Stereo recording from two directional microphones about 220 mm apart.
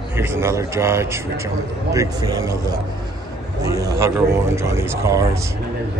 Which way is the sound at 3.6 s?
15° right (ahead or behind).